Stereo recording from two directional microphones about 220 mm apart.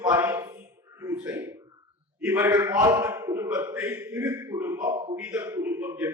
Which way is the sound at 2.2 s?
10° right (ahead or behind).